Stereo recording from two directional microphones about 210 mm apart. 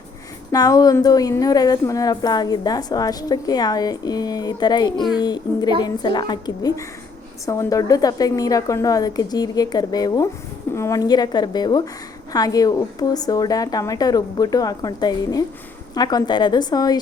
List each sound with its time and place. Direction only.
0.5 s a woman's voice: 20° left (ahead or behind)